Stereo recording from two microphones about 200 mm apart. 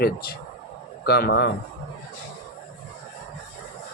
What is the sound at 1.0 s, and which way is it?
Speech, 50° left (ahead or behind).